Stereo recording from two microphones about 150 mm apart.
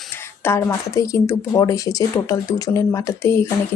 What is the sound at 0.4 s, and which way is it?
Speech, 20° left (ahead or behind).